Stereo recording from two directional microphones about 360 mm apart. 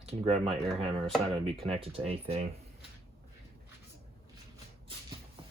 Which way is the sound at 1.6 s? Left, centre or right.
Centre.